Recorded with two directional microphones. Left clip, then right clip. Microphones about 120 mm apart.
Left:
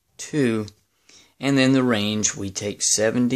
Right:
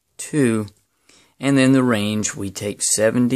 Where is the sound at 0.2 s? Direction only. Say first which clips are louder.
Right 3 dB; 40° right (ahead or behind).